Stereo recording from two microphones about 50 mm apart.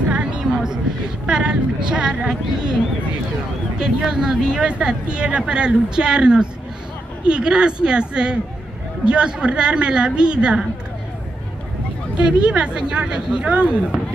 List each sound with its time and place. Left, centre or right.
0.1 s a sound: right
1.2 s speech: centre
3.8 s speech: centre
12.2 s speech: centre